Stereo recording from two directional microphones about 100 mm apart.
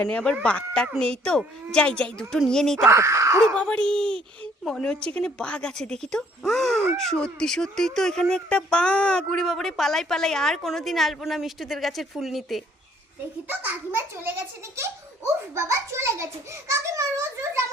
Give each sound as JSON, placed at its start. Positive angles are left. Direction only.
{"t": 0.0, "sound": "a child's voice", "side_deg": 10}
{"t": 2.8, "sound": "a child's voice", "side_deg": -30}
{"t": 3.4, "sound": "a child's voice", "side_deg": 10}
{"t": 13.5, "sound": "a child's voice", "side_deg": -20}